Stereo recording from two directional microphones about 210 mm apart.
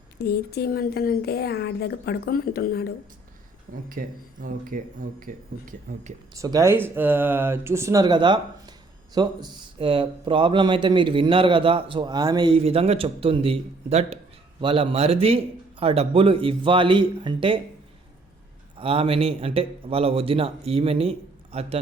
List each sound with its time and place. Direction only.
0.2 s speech: 50° left (ahead or behind)
3.8 s speech: 40° right (ahead or behind)
6.3 s a man's voice: 15° right (ahead or behind)
18.8 s a man's voice: 25° right (ahead or behind)